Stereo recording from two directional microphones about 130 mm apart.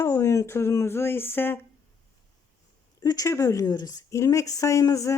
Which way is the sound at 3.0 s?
30° left (ahead or behind).